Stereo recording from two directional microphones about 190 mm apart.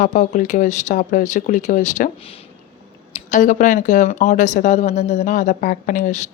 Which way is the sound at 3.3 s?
40° left (ahead or behind).